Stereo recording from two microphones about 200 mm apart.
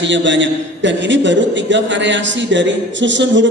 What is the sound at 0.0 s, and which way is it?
A man's voice, 65° right (ahead or behind).